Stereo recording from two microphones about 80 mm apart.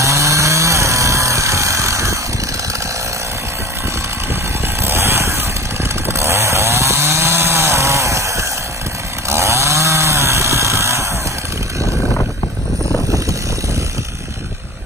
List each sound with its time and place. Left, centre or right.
0.0 s chainsaw: right
4.8 s vehicle: right
6.0 s chainsaw: right